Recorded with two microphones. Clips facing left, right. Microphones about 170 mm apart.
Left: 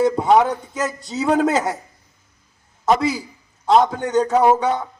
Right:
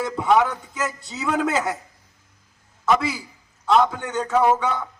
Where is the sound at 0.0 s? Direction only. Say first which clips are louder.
Left 4 dB; 40° left (ahead or behind).